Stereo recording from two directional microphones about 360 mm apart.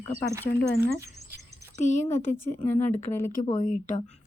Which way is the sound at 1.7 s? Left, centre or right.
Centre.